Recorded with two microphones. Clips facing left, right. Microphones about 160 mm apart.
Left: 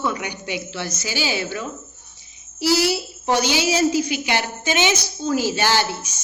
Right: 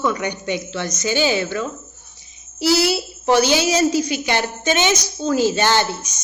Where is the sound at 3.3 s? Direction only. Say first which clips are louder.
Right 4 dB; 15° left (ahead or behind).